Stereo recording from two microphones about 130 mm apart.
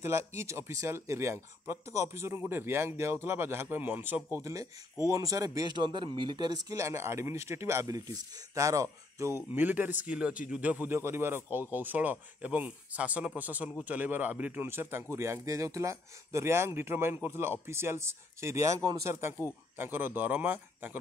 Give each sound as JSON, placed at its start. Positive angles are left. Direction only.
{"t": 0.0, "sound": "a man's voice", "side_deg": -20}